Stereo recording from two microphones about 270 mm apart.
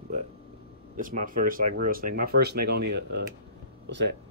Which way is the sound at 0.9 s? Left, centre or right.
Right.